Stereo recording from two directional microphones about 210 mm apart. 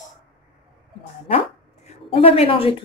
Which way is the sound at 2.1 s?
30° left (ahead or behind).